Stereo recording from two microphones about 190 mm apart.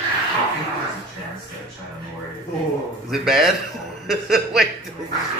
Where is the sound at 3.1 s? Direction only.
Centre (ahead or behind).